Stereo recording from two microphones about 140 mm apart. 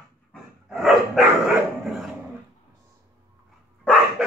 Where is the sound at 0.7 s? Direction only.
Centre (ahead or behind).